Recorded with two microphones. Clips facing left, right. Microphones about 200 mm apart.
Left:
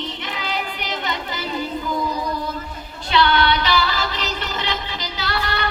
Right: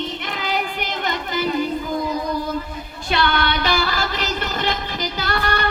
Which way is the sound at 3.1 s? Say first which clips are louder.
Left 3 dB; 50° right (ahead or behind).